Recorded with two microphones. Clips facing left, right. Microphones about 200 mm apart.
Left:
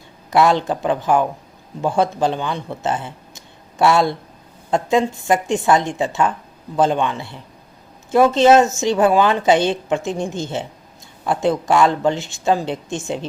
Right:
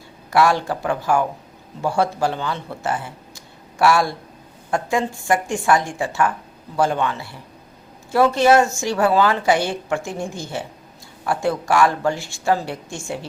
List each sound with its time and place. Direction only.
0.3 s a woman's voice: 20° left (ahead or behind)